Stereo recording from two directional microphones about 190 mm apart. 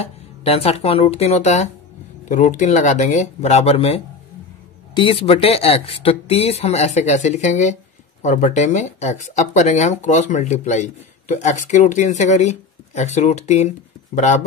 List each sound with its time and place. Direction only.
0.0 s speech: 35° left (ahead or behind)